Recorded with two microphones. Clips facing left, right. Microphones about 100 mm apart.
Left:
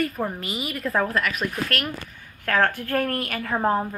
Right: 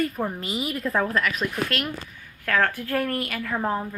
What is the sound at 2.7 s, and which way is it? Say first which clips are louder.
Speech: left 1 dB; 55° left (ahead or behind).